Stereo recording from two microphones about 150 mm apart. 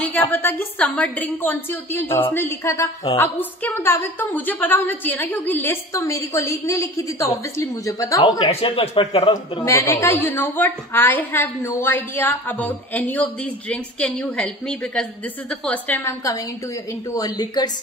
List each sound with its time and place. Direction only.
0.0 s a woman's voice: 10° left (ahead or behind); by 8.5 s 30° left (ahead or behind)
8.5 s speech: 40° left (ahead or behind)
9.7 s a woman's voice: 20° left (ahead or behind)